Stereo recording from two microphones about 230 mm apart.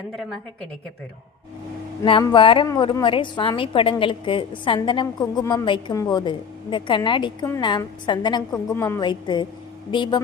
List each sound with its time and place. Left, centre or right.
2.0 s a woman's voice: left